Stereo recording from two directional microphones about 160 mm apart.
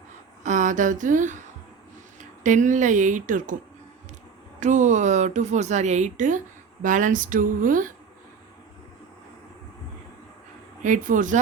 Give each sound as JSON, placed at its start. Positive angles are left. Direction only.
{"t": 0.4, "sound": "speech", "side_deg": -50}
{"t": 2.4, "sound": "speech", "side_deg": -50}
{"t": 4.6, "sound": "speech", "side_deg": -50}
{"t": 10.8, "sound": "speech", "side_deg": -55}